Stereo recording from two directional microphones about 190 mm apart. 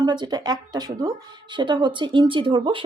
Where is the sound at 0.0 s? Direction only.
20° right (ahead or behind).